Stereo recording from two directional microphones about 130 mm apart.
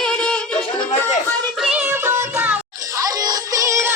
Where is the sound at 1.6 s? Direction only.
5° right (ahead or behind).